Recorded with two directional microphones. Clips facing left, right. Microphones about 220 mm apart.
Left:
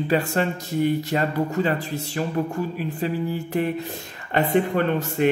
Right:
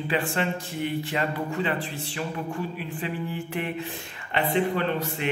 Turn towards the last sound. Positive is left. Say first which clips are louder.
# left 5 dB
turn(degrees=50)  # may be behind; listen again after turning